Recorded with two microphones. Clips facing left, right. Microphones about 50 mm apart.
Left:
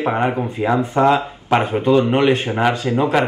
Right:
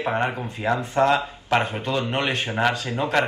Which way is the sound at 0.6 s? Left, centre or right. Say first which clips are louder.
Left 3 dB; centre.